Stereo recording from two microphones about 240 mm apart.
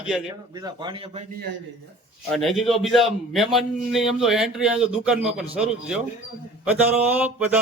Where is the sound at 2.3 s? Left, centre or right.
Centre.